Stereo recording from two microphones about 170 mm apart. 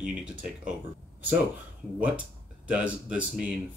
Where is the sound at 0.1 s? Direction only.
5° right (ahead or behind).